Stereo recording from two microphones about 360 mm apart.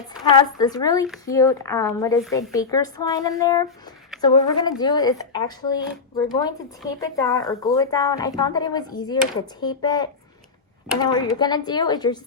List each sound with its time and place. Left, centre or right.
0.1 s speech: centre